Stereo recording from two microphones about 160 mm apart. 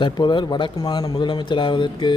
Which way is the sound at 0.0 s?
30° left (ahead or behind).